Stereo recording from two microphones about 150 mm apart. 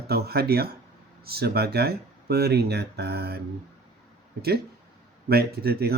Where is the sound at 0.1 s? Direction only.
90° right.